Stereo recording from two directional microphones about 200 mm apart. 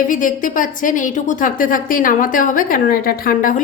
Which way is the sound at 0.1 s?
40° left (ahead or behind).